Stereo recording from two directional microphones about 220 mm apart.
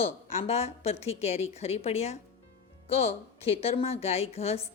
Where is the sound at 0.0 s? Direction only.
30° left (ahead or behind).